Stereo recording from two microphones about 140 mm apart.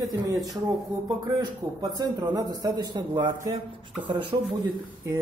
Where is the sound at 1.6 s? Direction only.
30° right (ahead or behind).